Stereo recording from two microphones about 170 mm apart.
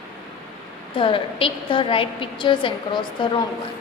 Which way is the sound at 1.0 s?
30° left (ahead or behind).